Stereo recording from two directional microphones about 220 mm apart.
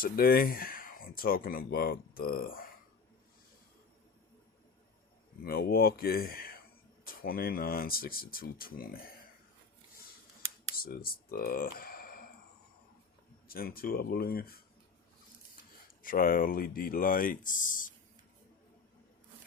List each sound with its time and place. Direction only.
0.0 s speech: 40° left (ahead or behind)
5.4 s speech: 45° left (ahead or behind)
10.8 s speech: 40° left (ahead or behind)
13.5 s speech: 40° left (ahead or behind)
16.0 s speech: 40° left (ahead or behind)